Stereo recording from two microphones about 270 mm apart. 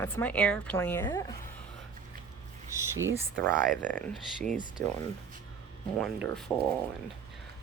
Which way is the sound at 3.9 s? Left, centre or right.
Centre.